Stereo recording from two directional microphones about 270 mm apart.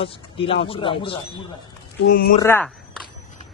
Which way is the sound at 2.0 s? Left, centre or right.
Left.